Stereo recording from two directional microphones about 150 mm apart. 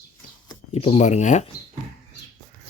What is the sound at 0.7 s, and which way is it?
Speech, 45° left (ahead or behind).